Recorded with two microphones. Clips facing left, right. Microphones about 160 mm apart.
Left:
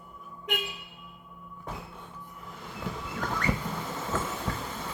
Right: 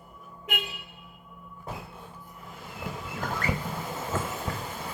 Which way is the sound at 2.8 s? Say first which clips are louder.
Even; 10° right (ahead or behind).